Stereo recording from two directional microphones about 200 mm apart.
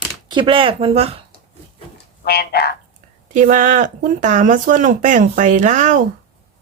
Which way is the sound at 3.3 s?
40° right (ahead or behind).